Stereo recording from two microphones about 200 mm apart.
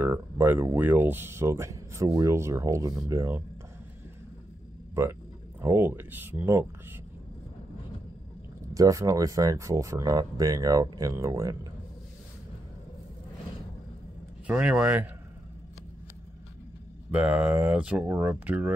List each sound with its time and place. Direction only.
0.0 s speech: 10° right (ahead or behind)
5.6 s speech: 10° right (ahead or behind)
8.7 s speech: 15° right (ahead or behind)
14.5 s speech: 5° right (ahead or behind)
17.1 s speech: 5° right (ahead or behind)